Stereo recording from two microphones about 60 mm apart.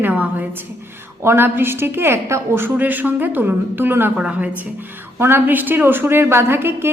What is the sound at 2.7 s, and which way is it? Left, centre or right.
A woman's voice, right.